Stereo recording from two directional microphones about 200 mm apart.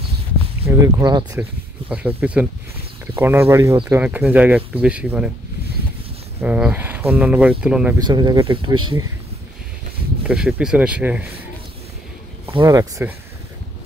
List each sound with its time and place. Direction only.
0.7 s speech: 15° right (ahead or behind)
6.4 s speech: 5° right (ahead or behind)
8.0 s speech: 20° right (ahead or behind)
10.2 s speech: 5° right (ahead or behind)
12.5 s speech: 15° right (ahead or behind)